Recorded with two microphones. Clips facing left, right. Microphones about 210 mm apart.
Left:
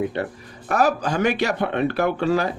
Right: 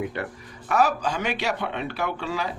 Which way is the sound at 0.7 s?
45° left (ahead or behind).